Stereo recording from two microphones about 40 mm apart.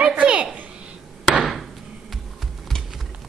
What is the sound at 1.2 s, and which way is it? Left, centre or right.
Hammer, centre.